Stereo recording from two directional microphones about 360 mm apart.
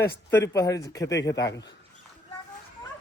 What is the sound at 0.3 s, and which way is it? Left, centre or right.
Speech, centre.